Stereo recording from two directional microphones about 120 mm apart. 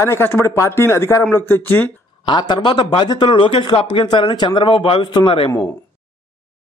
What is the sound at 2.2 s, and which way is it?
A man's voice, 40° left (ahead or behind).